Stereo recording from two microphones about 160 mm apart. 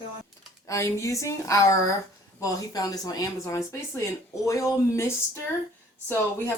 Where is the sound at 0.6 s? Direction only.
20° left (ahead or behind).